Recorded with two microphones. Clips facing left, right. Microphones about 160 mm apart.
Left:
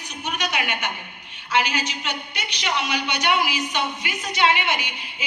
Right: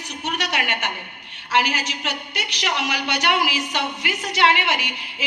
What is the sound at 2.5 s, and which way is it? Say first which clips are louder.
Speech: even; 85° right.